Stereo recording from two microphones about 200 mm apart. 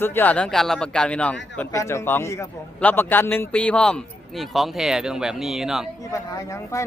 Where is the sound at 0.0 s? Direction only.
10° left (ahead or behind).